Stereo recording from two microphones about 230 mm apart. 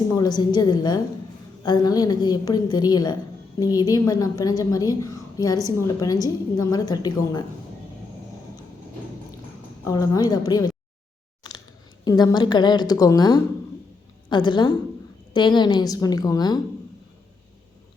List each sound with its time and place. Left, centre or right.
0.1 s a woman's voice: centre
9.8 s a woman's voice: centre
12.0 s a woman's voice: centre